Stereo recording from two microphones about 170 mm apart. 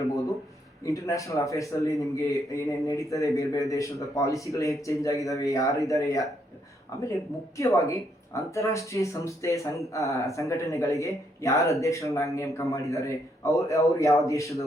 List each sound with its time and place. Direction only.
0.9 s speech: 20° left (ahead or behind)
7.5 s speech: 20° left (ahead or behind)